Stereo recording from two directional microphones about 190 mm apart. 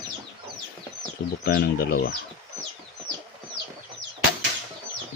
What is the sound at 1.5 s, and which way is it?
Speech, 55° left (ahead or behind).